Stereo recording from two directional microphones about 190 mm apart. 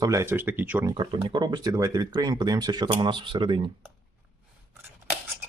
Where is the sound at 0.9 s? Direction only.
25° right (ahead or behind).